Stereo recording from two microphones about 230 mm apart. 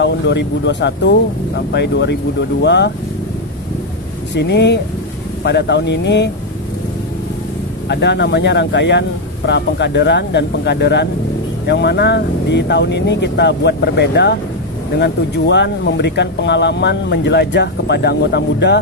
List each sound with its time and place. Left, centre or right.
0.0 s speech: left
4.4 s speech: left
7.9 s speech: left